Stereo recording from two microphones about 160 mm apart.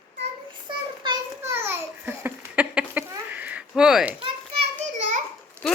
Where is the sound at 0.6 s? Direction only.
30° right (ahead or behind).